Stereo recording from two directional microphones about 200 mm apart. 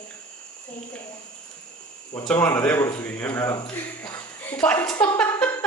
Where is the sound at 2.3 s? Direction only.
10° left (ahead or behind).